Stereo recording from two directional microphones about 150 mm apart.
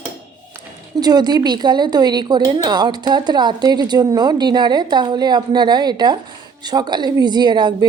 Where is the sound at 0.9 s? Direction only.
25° right (ahead or behind).